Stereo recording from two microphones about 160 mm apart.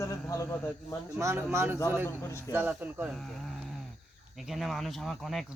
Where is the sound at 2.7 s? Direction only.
10° right (ahead or behind).